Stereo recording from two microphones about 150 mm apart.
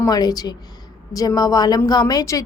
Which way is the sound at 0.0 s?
25° left (ahead or behind).